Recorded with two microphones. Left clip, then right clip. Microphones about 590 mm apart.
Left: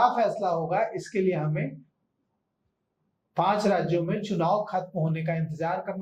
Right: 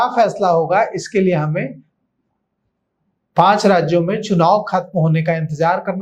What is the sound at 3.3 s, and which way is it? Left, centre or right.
Speech, right.